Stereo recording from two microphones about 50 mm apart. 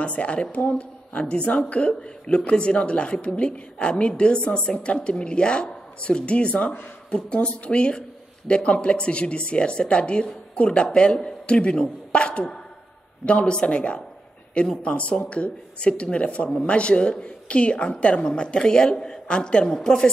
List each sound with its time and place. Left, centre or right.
0.0 s a woman's voice: left